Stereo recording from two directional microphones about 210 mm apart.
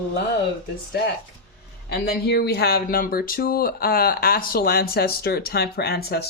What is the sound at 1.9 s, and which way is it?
Speech, 50° left (ahead or behind).